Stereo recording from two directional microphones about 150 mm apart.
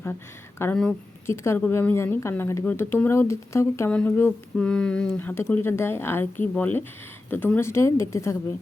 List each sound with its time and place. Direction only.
0.6 s speech: 15° left (ahead or behind)